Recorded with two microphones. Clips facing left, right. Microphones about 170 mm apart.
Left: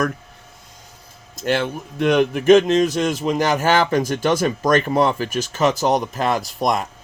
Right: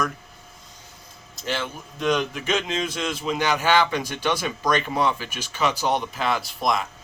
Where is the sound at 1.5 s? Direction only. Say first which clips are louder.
Left 8 dB; 60° left (ahead or behind).